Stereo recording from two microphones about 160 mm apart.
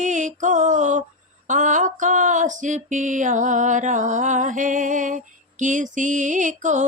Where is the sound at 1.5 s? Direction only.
50° right (ahead or behind).